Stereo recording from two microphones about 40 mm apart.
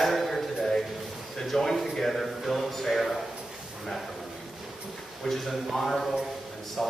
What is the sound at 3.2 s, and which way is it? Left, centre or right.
Drawer open or close, centre.